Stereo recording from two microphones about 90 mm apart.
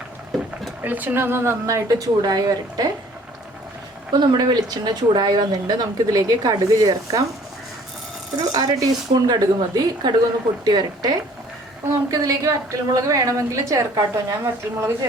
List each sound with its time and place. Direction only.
0.8 s a woman's voice: 20° right (ahead or behind); by 2.9 s 45° right (ahead or behind)
4.1 s a woman's voice: 55° right (ahead or behind)
8.4 s a woman's voice: 45° right (ahead or behind)
11.9 s a woman's voice: 40° right (ahead or behind)